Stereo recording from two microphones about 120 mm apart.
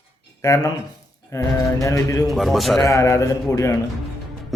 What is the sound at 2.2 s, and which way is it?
Speech, centre (ahead or behind).